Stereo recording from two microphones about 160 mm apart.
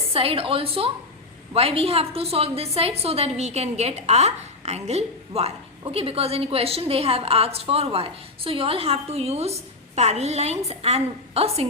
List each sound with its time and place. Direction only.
0.1 s a woman's voice: 35° right (ahead or behind)